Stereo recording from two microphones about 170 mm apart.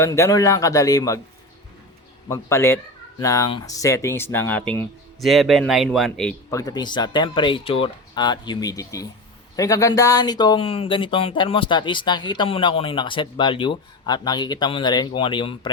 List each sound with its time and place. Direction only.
0.0 s speech: 20° left (ahead or behind)
2.2 s speech: 15° left (ahead or behind)
6.5 s speech: 20° left (ahead or behind)